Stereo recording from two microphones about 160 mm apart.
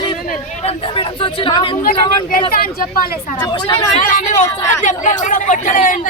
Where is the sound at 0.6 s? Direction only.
35° left (ahead or behind).